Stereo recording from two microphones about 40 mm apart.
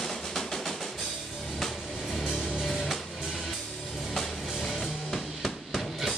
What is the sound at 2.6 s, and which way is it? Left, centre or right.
Music, centre.